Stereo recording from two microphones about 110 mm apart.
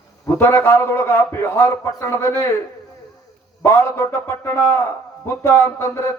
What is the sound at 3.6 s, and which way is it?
Speech, 20° left (ahead or behind).